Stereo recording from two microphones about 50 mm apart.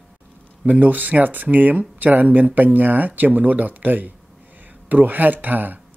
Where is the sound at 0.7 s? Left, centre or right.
Right.